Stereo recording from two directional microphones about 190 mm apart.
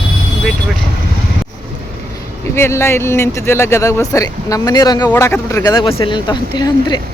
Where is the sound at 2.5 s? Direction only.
15° left (ahead or behind).